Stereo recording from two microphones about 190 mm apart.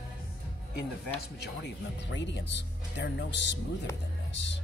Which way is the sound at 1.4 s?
65° left (ahead or behind).